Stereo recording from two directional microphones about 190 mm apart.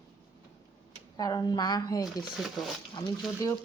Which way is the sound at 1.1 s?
20° left (ahead or behind).